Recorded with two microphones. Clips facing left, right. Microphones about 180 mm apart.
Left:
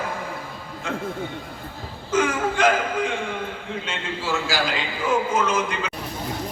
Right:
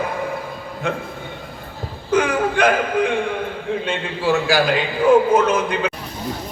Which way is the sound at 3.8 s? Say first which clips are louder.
Right 7 dB; 60° right (ahead or behind).